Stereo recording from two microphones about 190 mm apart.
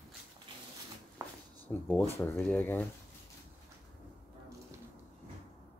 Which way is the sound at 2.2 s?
5° left (ahead or behind).